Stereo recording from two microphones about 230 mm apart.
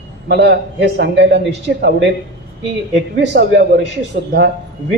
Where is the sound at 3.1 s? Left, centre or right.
Right.